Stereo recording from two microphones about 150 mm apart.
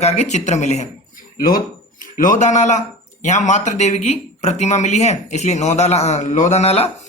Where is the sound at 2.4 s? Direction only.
50° left (ahead or behind).